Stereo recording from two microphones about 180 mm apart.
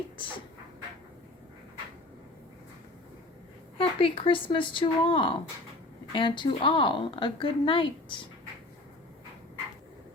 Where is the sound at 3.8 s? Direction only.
30° left (ahead or behind).